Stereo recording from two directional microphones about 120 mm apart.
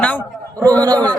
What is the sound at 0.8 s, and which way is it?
Speech, 35° right (ahead or behind).